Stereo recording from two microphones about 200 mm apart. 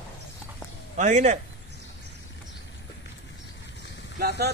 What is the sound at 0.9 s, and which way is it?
Speech, 35° right (ahead or behind).